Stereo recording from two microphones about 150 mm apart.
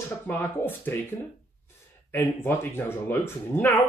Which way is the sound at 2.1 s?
15° left (ahead or behind).